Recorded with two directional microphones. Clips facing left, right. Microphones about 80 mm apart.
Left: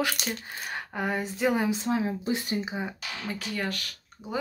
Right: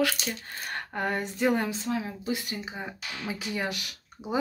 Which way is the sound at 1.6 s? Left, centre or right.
Left.